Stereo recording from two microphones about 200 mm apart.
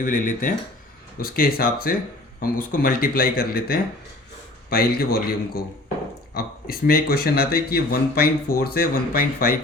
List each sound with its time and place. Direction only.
0.0 s speech: 40° left (ahead or behind)
6.3 s speech: 50° left (ahead or behind)